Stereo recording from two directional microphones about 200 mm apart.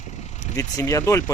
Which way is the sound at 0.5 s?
15° left (ahead or behind).